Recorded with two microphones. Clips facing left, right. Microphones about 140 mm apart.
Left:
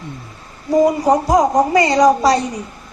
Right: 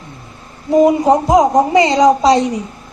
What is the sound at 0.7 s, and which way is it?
A woman's voice, 20° right (ahead or behind).